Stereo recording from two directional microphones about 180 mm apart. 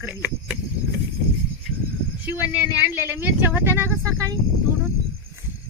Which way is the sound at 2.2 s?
10° right (ahead or behind).